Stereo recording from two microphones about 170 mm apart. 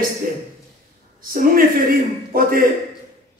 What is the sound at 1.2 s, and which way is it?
Speech, 60° right (ahead or behind).